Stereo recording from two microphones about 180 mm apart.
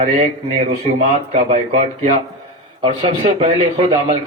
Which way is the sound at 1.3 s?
40° right (ahead or behind).